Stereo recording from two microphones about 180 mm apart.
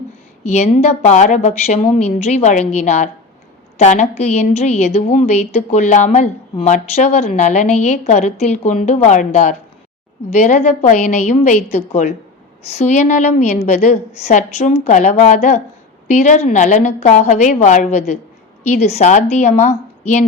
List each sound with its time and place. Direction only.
0.4 s a woman's voice: 35° left (ahead or behind)